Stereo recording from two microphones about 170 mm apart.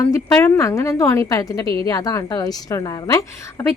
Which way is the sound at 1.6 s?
30° right (ahead or behind).